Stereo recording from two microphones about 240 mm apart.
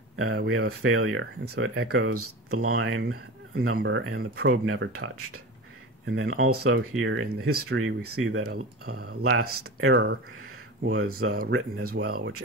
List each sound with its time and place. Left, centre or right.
0.1 s a sound: right
0.5 s speech: right
4.6 s speech: right